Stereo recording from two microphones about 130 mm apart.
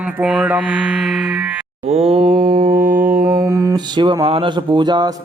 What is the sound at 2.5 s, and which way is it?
Music, 90° right.